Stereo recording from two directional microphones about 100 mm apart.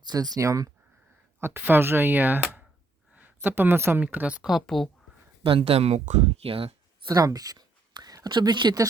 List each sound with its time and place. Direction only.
0.0 s speech: 40° right (ahead or behind)
1.4 s speech: 20° right (ahead or behind)
4.0 s speech: 15° right (ahead or behind); by 4.9 s centre (ahead or behind)
5.4 s speech: 70° right (ahead or behind)
7.1 s speech: 35° right (ahead or behind)